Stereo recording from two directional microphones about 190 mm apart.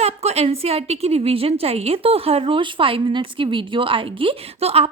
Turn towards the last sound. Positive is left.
turn(degrees=-30)  # may be behind; listen again after turning